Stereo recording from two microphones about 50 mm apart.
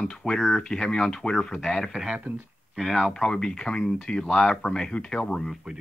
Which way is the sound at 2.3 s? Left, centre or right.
Right.